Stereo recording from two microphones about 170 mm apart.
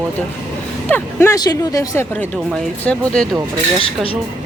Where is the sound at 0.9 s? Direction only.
15° left (ahead or behind).